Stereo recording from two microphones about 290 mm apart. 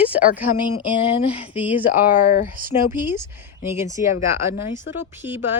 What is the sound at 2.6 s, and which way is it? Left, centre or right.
Speech, right.